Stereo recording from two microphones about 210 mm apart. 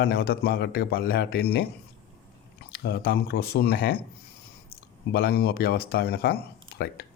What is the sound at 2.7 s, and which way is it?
A man's voice, 50° left (ahead or behind).